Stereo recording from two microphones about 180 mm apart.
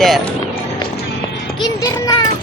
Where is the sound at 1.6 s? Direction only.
20° left (ahead or behind).